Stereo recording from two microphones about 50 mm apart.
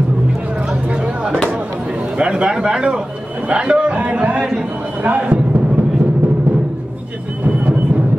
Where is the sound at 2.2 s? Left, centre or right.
Centre.